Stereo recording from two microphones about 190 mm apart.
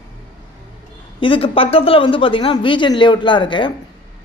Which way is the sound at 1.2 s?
30° left (ahead or behind).